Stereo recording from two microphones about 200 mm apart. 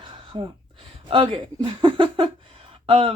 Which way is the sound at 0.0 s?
25° right (ahead or behind).